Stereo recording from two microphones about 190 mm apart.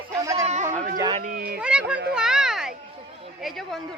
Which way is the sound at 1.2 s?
50° right (ahead or behind).